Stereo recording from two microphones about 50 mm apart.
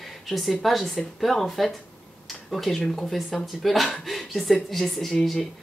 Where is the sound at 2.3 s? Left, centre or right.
Centre.